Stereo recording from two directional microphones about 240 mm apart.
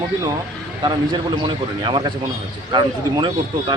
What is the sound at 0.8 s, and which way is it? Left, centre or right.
A man's voice, centre.